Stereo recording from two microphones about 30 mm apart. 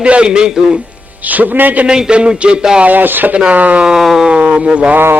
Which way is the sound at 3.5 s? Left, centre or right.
Right.